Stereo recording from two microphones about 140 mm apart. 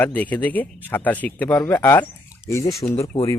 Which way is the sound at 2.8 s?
35° left (ahead or behind).